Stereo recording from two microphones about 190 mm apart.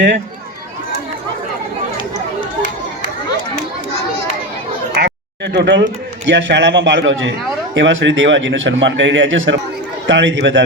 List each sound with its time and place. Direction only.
4.9 s speech: 60° right (ahead or behind)